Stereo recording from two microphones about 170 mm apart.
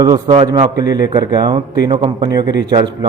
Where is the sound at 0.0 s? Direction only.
20° right (ahead or behind).